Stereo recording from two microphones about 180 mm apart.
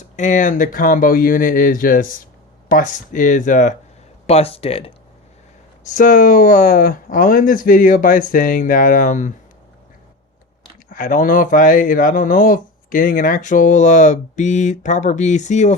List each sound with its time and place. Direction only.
0.0 s speech: 45° left (ahead or behind)
4.3 s speech: 35° left (ahead or behind)
5.8 s speech: 45° left (ahead or behind)
10.8 s speech: 45° left (ahead or behind)